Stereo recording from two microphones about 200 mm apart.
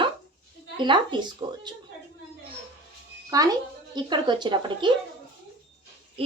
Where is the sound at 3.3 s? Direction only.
20° right (ahead or behind).